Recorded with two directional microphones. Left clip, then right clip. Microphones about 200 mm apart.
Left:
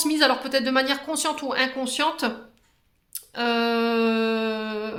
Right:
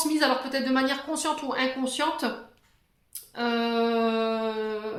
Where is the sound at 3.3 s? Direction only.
40° left (ahead or behind).